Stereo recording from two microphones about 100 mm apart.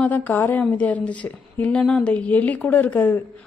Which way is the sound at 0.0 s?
15° left (ahead or behind).